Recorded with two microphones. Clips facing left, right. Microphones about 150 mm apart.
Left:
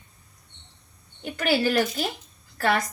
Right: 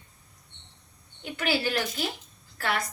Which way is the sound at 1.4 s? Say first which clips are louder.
Left 5 dB; 45° left (ahead or behind).